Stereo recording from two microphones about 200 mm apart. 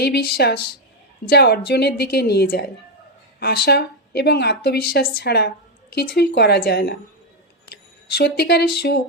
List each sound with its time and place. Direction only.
0.0 s a woman's voice: 55° left (ahead or behind)